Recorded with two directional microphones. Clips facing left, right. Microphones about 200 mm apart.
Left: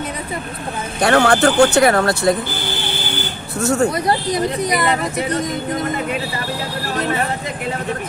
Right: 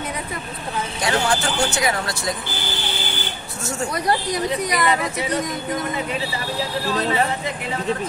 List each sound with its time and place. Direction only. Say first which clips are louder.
1.0 s speech: left 9 dB; 65° left (ahead or behind)
3.6 s speech: left 7 dB; 60° left (ahead or behind)